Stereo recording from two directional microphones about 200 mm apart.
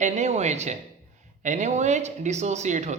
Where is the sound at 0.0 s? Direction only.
35° right (ahead or behind).